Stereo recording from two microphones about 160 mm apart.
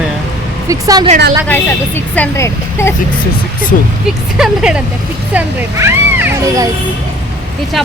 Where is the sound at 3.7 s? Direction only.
60° left (ahead or behind).